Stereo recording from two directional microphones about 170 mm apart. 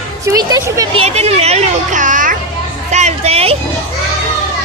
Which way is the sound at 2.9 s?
40° right (ahead or behind).